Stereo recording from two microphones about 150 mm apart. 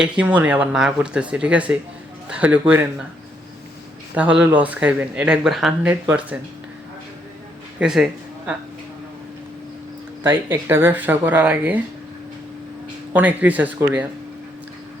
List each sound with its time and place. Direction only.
0.0 s speech: 10° right (ahead or behind)
4.1 s speech: 10° right (ahead or behind)
7.8 s a sound: 5° right (ahead or behind)
10.2 s speech: 15° right (ahead or behind)
13.1 s speech: 10° right (ahead or behind)